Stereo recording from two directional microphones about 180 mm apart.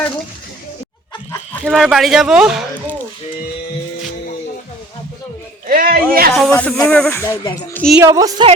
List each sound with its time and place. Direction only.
1.6 s speech: centre (ahead or behind)
5.6 s a sound: 50° right (ahead or behind)
6.5 s a woman's voice: 5° left (ahead or behind)
8.0 s a woman's voice: 20° right (ahead or behind)